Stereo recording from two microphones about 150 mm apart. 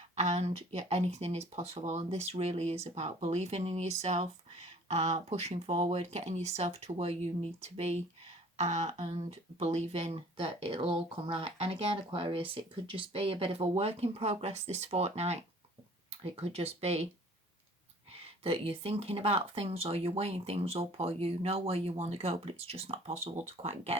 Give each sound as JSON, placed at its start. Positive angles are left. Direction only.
{"t": 0.2, "sound": "speech", "side_deg": -45}
{"t": 18.4, "sound": "speech", "side_deg": -40}